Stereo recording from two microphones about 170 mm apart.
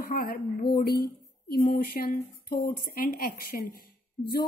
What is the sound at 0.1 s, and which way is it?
A woman's voice, 60° left (ahead or behind).